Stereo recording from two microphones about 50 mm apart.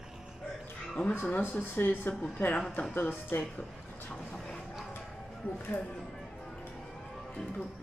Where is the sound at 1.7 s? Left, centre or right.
Left.